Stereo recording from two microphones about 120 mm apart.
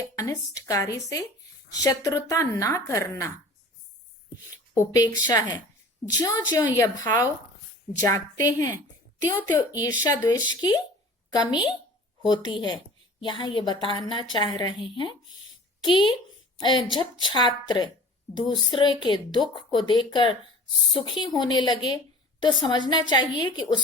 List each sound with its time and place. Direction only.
0.2 s a woman's voice: 30° left (ahead or behind)
4.8 s a woman's voice: 30° left (ahead or behind)